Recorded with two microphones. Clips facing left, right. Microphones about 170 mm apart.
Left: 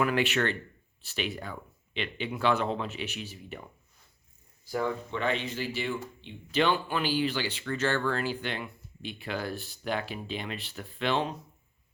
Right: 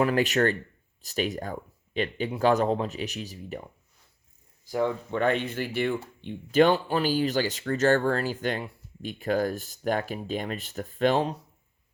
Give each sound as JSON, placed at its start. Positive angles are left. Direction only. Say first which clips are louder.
{"t": 0.0, "sound": "speech", "louder": "right 4 dB", "side_deg": -40}
{"t": 4.6, "sound": "speech", "louder": "right 4 dB", "side_deg": -20}
{"t": 5.1, "sound": "speech", "louder": "right 5 dB", "side_deg": -50}
{"t": 6.2, "sound": "speech", "louder": "right 7 dB", "side_deg": -45}